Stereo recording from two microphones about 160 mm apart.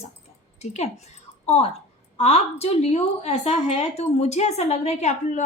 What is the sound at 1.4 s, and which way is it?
A woman's voice, 40° left (ahead or behind).